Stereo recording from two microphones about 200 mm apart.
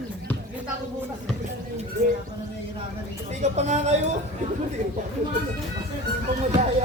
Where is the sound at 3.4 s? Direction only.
35° right (ahead or behind).